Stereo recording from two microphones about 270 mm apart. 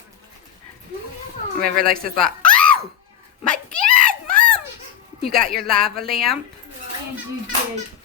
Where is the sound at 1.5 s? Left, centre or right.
Right.